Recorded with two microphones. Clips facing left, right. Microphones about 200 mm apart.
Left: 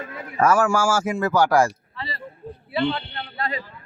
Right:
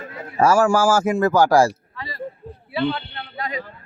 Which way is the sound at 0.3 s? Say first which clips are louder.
Right 3 dB; 30° right (ahead or behind).